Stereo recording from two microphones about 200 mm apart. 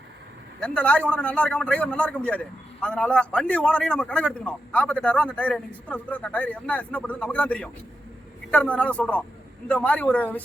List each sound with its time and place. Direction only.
0.6 s a man's voice: 5° left (ahead or behind)